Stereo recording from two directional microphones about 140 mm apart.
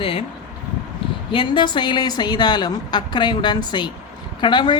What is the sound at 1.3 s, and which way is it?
A woman's voice, 35° left (ahead or behind).